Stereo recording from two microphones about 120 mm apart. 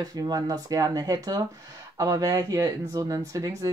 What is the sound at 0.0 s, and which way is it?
Speech, 30° right (ahead or behind).